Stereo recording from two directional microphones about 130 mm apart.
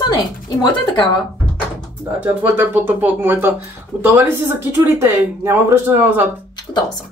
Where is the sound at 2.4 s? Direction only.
15° right (ahead or behind).